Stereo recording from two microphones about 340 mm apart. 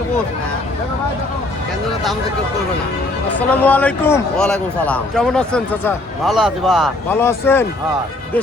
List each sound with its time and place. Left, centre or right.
3.3 s a man's voice: centre